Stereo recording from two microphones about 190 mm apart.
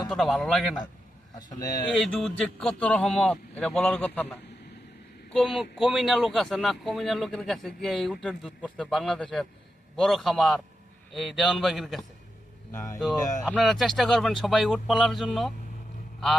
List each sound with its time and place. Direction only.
0.1 s speech: centre (ahead or behind)
1.4 s speech: 20° left (ahead or behind)
2.0 s speech: centre (ahead or behind)
12.7 s speech: 15° left (ahead or behind)
13.5 s speech: centre (ahead or behind)